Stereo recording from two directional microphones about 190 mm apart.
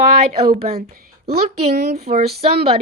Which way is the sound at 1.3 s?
60° right (ahead or behind).